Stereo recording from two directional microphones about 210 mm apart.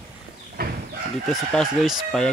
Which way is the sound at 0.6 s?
45° right (ahead or behind).